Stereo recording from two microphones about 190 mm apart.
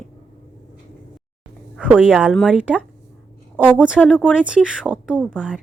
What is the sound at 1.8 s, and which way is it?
A woman's voice, 10° right (ahead or behind).